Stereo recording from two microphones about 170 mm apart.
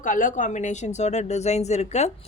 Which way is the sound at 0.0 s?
50° left (ahead or behind).